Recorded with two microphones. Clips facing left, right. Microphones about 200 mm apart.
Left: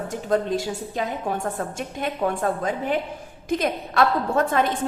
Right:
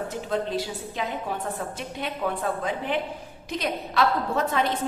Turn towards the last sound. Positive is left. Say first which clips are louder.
# left 4 dB
turn(degrees=50)  # may be behind; listen again after turning